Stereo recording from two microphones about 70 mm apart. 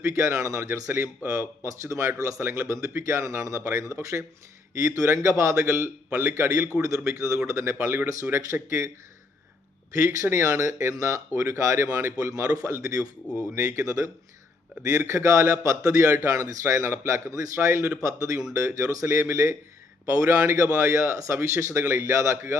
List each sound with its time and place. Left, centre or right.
0.1 s speech: right
2.4 s speech: right
10.0 s speech: right
12.1 s a man's voice: right
13.6 s speech: right
17.3 s speech: right
19.0 s speech: right
20.1 s speech: right